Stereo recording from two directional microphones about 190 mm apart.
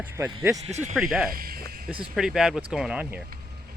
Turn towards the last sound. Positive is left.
turn(degrees=-5)  # may be behind; listen again after turning